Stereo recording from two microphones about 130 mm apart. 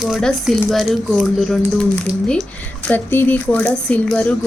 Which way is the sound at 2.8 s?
15° left (ahead or behind).